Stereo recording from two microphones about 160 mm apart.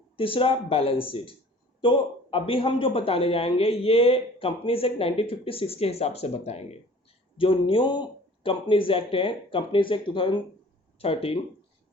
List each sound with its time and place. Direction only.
0.2 s a man's voice: 35° left (ahead or behind)